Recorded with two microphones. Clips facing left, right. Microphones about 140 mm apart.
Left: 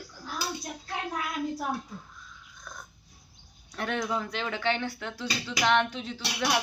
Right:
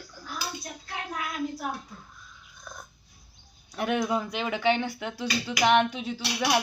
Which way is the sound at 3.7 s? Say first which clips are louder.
Right 4 dB; 10° right (ahead or behind).